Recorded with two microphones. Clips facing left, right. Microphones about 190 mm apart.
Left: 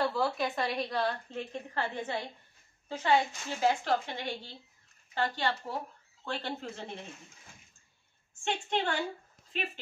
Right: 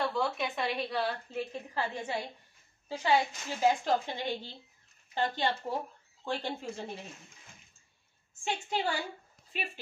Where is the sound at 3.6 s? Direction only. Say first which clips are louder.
Right 1 dB; 15° right (ahead or behind).